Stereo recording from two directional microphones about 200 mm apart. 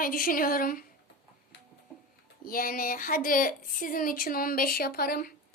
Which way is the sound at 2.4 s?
45° left (ahead or behind).